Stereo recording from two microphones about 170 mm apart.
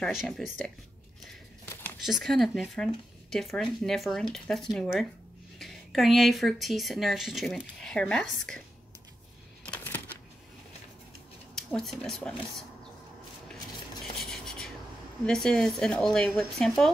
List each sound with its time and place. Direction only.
0.0 s speech: centre (ahead or behind)
2.0 s speech: centre (ahead or behind)
9.6 s a sound: 5° left (ahead or behind)
11.5 s speech: 5° left (ahead or behind)
14.2 s a sound: centre (ahead or behind)
15.2 s speech: 5° left (ahead or behind)